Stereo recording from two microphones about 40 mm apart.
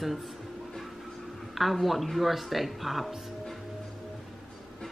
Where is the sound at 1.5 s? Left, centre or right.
Centre.